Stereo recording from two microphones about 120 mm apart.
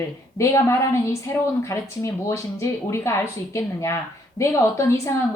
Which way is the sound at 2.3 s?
25° left (ahead or behind).